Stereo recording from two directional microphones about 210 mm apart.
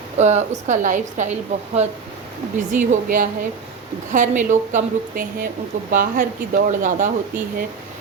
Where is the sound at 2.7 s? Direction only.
40° right (ahead or behind).